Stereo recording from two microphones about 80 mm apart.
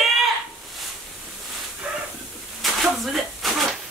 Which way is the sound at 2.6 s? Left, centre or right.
Centre.